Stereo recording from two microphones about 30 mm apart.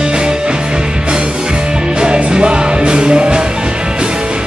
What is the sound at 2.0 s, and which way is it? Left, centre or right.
Music, right.